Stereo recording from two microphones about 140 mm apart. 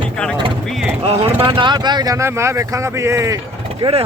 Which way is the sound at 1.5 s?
35° right (ahead or behind).